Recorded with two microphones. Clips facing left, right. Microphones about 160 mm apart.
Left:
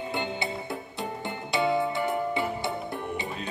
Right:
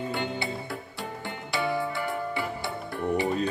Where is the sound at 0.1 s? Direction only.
20° left (ahead or behind).